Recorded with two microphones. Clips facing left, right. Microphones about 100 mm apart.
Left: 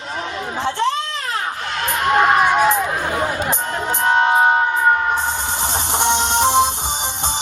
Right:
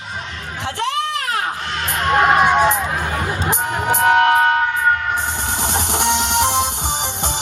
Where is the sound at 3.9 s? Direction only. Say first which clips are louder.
Right 3 dB; 70° right (ahead or behind).